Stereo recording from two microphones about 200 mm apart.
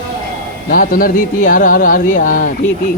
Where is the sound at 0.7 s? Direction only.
45° left (ahead or behind).